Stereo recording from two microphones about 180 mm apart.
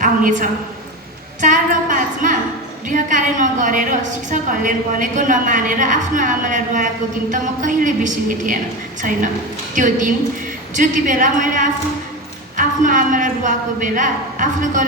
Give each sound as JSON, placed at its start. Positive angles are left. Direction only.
{"t": 0.0, "sound": "a woman's voice", "side_deg": -45}
{"t": 1.4, "sound": "a sound", "side_deg": -45}
{"t": 2.9, "sound": "a woman's voice", "side_deg": -45}